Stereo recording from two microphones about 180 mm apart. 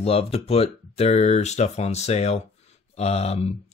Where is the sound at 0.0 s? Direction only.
35° left (ahead or behind).